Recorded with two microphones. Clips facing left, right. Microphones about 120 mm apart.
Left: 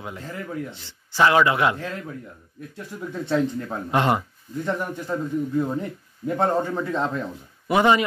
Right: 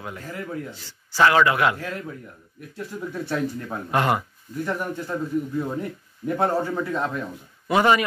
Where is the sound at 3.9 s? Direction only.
20° left (ahead or behind).